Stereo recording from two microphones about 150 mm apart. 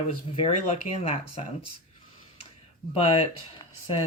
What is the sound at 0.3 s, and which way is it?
Speech, 40° left (ahead or behind).